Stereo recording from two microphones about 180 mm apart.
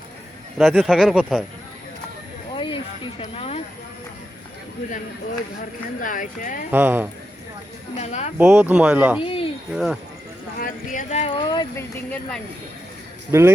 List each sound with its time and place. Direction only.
0.6 s speech: centre (ahead or behind)
2.6 s a sound: 25° left (ahead or behind)
3.2 s speech: 35° left (ahead or behind)
6.0 s speech: 50° left (ahead or behind)
6.7 s speech: 10° right (ahead or behind)
7.9 s speech: 40° left (ahead or behind)
8.4 s speech: 10° right (ahead or behind)
9.2 s a sound: 30° left (ahead or behind)
9.7 s speech: 5° right (ahead or behind)
10.6 s speech: 50° left (ahead or behind); by 11.7 s 25° left (ahead or behind)
13.3 s speech: 15° right (ahead or behind)